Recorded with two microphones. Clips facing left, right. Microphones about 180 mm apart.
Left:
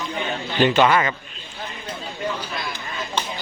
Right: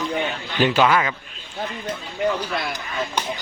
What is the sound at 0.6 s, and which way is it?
Speech, 5° right (ahead or behind).